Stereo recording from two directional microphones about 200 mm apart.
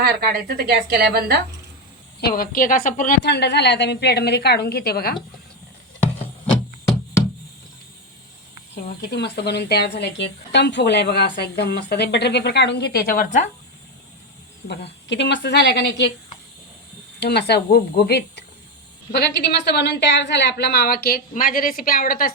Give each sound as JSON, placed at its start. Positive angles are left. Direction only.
{"t": 0.0, "sound": "a woman's voice", "side_deg": -50}
{"t": 2.3, "sound": "a woman's voice", "side_deg": 45}
{"t": 9.0, "sound": "speech", "side_deg": 55}
{"t": 15.1, "sound": "speech", "side_deg": 60}
{"t": 17.2, "sound": "a woman's voice", "side_deg": 55}